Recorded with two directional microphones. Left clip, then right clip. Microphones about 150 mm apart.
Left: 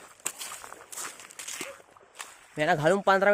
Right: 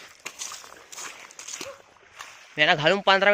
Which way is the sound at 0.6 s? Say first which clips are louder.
Right 1 dB; centre (ahead or behind).